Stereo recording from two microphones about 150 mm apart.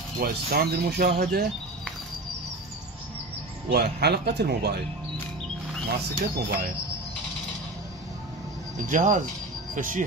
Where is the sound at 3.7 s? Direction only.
90° right.